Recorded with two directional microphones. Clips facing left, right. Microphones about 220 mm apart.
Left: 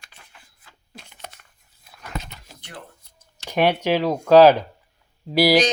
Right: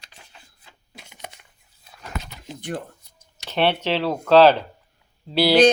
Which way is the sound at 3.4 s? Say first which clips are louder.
Left 2 dB; 10° left (ahead or behind).